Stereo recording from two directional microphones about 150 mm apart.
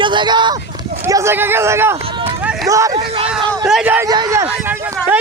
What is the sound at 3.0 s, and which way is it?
Speech, 40° right (ahead or behind).